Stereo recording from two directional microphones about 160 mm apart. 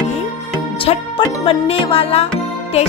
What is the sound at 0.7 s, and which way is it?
Music, 35° left (ahead or behind).